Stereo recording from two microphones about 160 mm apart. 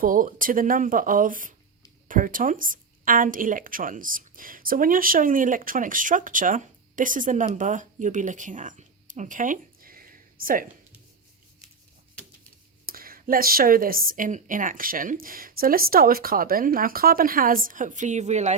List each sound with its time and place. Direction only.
0.0 s a woman's voice: 60° right (ahead or behind)
12.8 s a woman's voice: 65° right (ahead or behind); by 18.5 s 45° right (ahead or behind)